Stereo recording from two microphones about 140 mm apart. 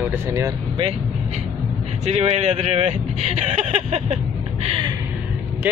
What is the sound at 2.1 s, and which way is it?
Speech, 50° right (ahead or behind).